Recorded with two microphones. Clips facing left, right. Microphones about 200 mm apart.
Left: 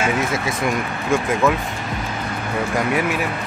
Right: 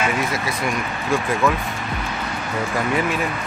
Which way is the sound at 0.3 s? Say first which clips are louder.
Left 2 dB; 25° left (ahead or behind).